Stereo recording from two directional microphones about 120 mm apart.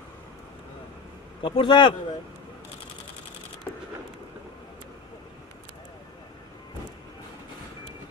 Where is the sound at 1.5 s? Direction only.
40° left (ahead or behind).